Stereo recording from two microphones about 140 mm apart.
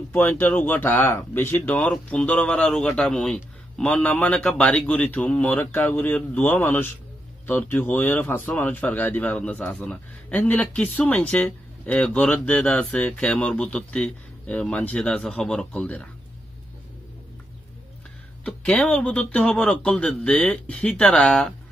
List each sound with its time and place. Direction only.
0.1 s speech: 10° left (ahead or behind)
18.4 s speech: 10° left (ahead or behind)